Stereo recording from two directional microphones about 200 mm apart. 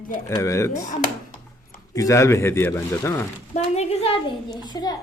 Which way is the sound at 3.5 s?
30° left (ahead or behind).